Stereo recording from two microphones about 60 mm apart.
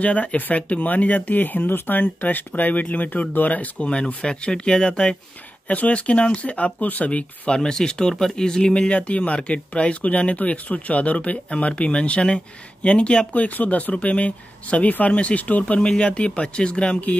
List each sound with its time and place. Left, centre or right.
0.0 s speech: left
5.7 s speech: left